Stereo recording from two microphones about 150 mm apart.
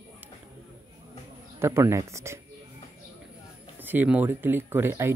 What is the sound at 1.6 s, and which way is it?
Speech, 15° right (ahead or behind).